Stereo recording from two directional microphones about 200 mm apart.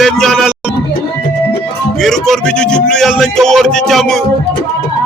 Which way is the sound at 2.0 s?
Centre (ahead or behind).